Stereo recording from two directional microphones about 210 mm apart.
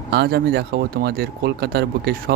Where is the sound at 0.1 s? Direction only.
50° right (ahead or behind).